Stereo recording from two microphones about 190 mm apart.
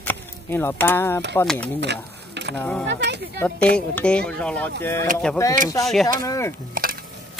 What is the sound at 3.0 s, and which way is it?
Speech, 65° right (ahead or behind).